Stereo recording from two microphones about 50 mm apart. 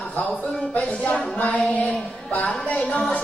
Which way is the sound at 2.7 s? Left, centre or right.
Left.